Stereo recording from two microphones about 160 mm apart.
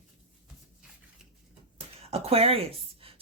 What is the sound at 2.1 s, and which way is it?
A woman's voice, 40° right (ahead or behind).